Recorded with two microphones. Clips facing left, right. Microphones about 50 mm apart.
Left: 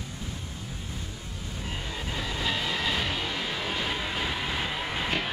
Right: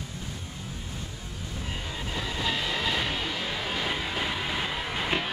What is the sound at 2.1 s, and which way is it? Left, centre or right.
Music, centre.